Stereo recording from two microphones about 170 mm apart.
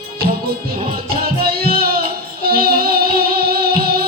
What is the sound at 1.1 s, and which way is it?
Music, 60° right (ahead or behind).